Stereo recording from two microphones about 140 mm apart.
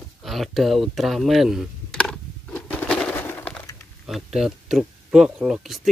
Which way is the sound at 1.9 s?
5° left (ahead or behind).